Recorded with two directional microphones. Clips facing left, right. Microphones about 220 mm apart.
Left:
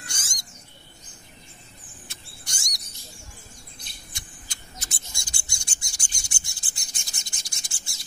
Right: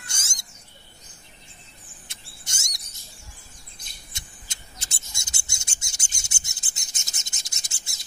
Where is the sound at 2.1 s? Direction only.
25° right (ahead or behind).